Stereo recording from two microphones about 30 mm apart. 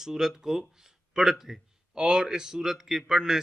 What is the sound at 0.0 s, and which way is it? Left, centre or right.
A man's voice, centre.